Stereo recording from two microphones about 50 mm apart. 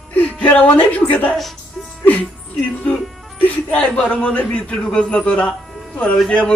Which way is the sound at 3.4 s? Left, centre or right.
Left.